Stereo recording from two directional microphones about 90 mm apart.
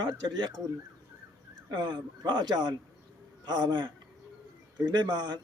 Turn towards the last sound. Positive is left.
turn(degrees=-50)  # may be behind; listen again after turning